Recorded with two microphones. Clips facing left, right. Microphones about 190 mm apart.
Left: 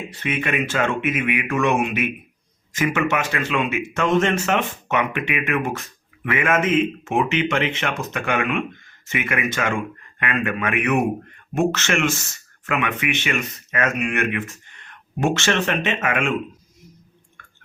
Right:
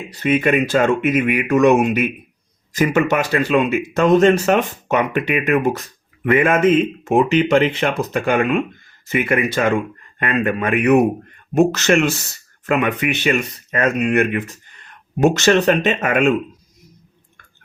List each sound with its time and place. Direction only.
0.1 s speech: 40° right (ahead or behind)